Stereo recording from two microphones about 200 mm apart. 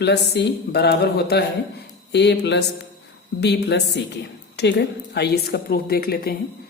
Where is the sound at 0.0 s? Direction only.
55° left (ahead or behind).